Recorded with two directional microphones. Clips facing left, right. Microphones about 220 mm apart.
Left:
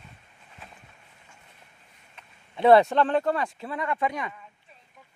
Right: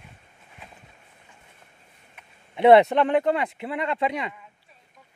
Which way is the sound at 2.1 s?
20° right (ahead or behind).